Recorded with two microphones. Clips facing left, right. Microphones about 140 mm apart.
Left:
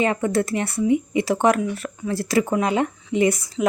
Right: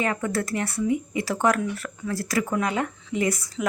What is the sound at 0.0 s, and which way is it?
Speech, 25° left (ahead or behind).